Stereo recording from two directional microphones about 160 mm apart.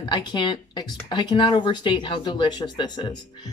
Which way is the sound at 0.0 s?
30° left (ahead or behind).